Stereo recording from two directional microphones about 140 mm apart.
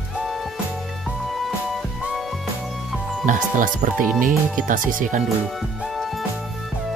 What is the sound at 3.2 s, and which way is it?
Speech, 70° right (ahead or behind).